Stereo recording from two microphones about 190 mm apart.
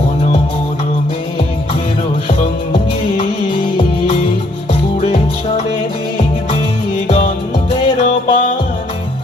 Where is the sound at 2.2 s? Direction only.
30° left (ahead or behind).